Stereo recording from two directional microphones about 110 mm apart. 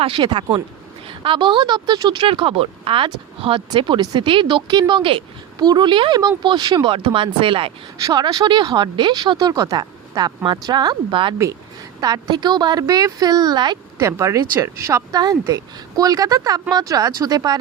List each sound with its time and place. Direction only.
0.0 s speech: 50° right (ahead or behind)
5.5 s speech: 40° right (ahead or behind)
8.0 s speech: 40° right (ahead or behind)
9.5 s speech: 30° right (ahead or behind); by 11.3 s 50° right (ahead or behind)
11.9 s speech: 35° right (ahead or behind)
14.0 s speech: 25° right (ahead or behind)